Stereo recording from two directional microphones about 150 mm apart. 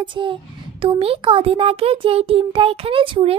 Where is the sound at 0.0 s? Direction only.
35° right (ahead or behind).